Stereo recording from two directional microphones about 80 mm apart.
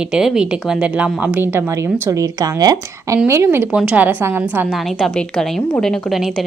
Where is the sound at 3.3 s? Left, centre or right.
Right.